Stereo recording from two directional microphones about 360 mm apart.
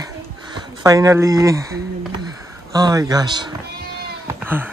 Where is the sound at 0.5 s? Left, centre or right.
Centre.